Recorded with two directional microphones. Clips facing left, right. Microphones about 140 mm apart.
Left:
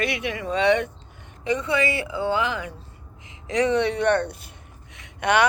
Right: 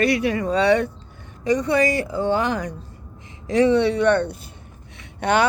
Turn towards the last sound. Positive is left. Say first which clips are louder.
# right 1 dB
turn(degrees=-30)  # may be behind; listen again after turning